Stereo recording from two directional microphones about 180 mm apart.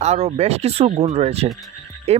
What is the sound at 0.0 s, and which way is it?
Speech, 40° right (ahead or behind).